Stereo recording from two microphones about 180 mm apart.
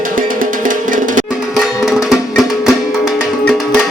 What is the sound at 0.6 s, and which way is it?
Music, 45° right (ahead or behind).